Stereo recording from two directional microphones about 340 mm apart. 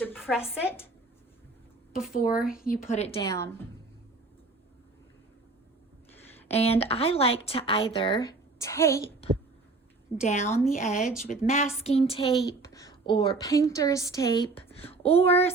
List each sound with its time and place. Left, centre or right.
0.0 s speech: centre
2.5 s speech: left; by 3.5 s centre
6.1 s a sound: centre
6.6 s speech: centre
10.2 s speech: left
10.4 s speech: centre
10.7 s speech: left
11.0 s speech: centre
11.4 s a woman's voice: left